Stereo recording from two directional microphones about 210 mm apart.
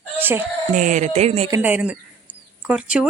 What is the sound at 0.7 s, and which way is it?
Speech, 35° right (ahead or behind).